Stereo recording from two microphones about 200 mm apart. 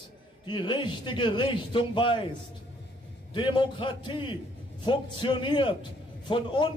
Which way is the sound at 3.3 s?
25° left (ahead or behind).